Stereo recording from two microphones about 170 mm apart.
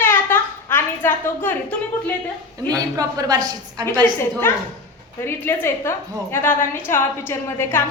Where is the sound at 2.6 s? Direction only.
20° right (ahead or behind).